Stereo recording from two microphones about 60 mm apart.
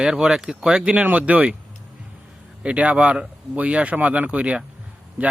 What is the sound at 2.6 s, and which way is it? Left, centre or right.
Speech, right.